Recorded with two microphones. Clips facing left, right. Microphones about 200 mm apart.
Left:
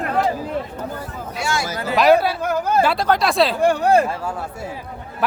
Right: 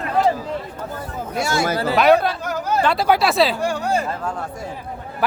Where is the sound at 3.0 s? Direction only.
5° right (ahead or behind).